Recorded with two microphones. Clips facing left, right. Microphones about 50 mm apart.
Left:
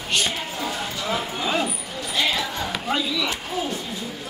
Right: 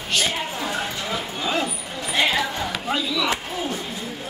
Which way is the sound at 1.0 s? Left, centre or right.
Centre.